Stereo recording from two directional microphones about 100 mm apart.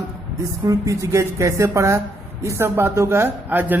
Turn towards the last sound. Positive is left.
turn(degrees=-20)  # may be behind; listen again after turning